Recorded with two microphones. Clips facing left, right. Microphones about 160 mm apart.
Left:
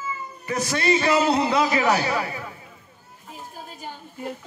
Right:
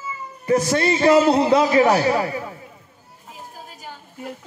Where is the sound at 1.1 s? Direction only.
40° right (ahead or behind).